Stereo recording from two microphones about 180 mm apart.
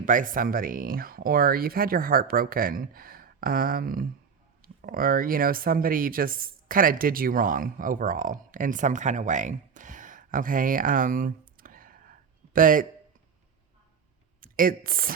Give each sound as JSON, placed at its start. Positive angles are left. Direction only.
{"t": 0.0, "sound": "speech", "side_deg": -50}
{"t": 14.4, "sound": "speech", "side_deg": -50}